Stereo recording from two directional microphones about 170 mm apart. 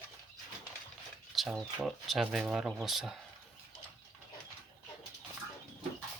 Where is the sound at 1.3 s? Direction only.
Centre (ahead or behind).